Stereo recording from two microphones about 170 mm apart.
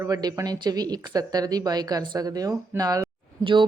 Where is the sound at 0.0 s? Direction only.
20° right (ahead or behind).